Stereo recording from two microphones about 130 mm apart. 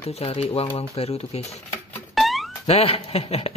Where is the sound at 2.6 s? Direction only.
50° left (ahead or behind).